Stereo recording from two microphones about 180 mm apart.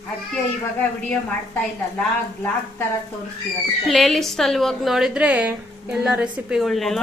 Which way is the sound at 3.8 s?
Centre (ahead or behind).